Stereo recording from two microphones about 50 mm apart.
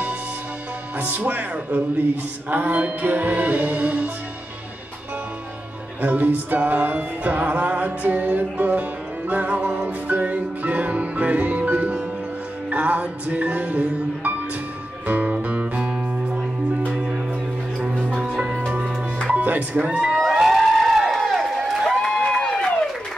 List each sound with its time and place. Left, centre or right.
0.9 s speech: right
2.5 s music: right
5.9 s music: right
16.9 s music: centre
18.2 s music: centre
19.3 s music: right
20.2 s a sound: centre
21.0 s crowd: centre
21.5 s a sound: centre
21.9 s a sound: centre
22.2 s run: centre